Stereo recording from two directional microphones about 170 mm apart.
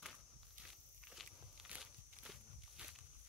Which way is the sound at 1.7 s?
5° right (ahead or behind).